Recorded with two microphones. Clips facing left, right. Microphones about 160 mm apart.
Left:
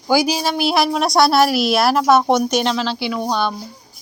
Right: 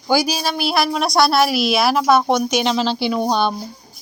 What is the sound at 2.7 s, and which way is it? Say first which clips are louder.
Speech: right 2 dB; 25° right (ahead or behind).